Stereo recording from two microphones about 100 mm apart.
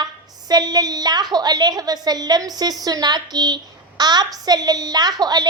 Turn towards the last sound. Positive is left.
turn(degrees=-45)  # may be behind; listen again after turning